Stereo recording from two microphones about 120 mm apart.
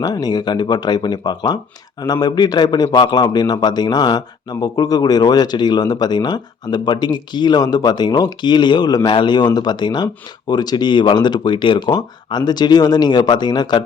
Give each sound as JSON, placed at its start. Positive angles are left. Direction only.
{"t": 0.0, "sound": "speech", "side_deg": 35}